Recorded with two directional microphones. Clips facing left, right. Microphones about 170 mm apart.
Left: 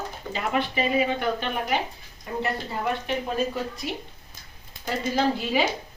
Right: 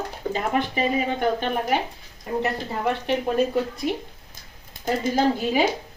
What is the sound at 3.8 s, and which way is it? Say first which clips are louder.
Speech: right 6 dB; 55° right (ahead or behind).